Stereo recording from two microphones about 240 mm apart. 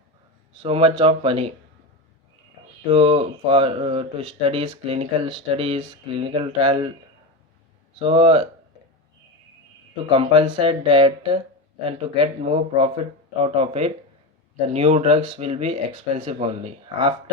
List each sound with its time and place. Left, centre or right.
0.6 s speech: right
2.9 s speech: right
7.9 s speech: right
10.1 s speech: right